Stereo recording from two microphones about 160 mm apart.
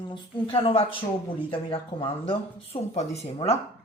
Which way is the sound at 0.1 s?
35° left (ahead or behind).